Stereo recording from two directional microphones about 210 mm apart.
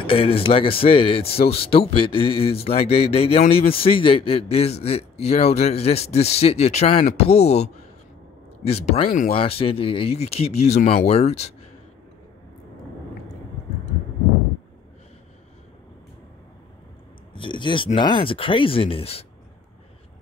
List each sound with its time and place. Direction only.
0.0 s speech: 25° left (ahead or behind)
17.3 s speech: 25° left (ahead or behind)